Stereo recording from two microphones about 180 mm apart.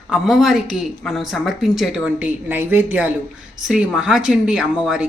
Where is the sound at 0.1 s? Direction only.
Centre (ahead or behind).